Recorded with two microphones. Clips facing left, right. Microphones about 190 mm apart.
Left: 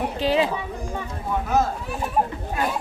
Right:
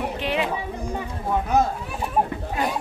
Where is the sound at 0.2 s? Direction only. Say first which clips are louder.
Left 6 dB; 35° left (ahead or behind).